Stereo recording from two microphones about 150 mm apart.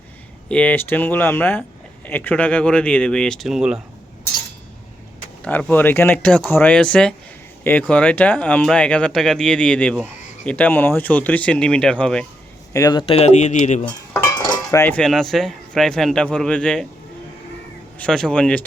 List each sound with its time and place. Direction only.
0.4 s speech: 10° left (ahead or behind)
5.4 s speech: 10° left (ahead or behind)
12.7 s speech: 25° left (ahead or behind); by 13.9 s 50° left (ahead or behind)
14.3 s cutlery: 25° left (ahead or behind)
14.9 s a man's voice: 5° left (ahead or behind)
17.9 s speech: 5° left (ahead or behind)